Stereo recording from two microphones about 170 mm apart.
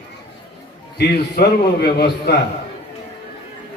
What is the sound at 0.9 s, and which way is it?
A man's voice, 75° left (ahead or behind).